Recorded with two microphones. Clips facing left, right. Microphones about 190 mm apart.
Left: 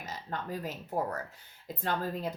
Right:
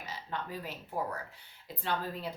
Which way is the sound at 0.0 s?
45° left (ahead or behind).